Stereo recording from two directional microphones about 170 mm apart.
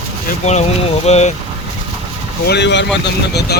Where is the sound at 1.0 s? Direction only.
40° left (ahead or behind).